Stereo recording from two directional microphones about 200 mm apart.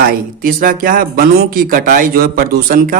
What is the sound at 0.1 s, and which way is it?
Speech, 45° right (ahead or behind).